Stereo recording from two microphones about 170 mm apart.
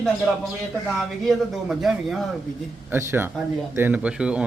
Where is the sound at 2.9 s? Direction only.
10° right (ahead or behind).